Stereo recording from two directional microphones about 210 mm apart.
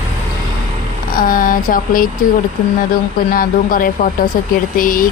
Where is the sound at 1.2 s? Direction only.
40° left (ahead or behind).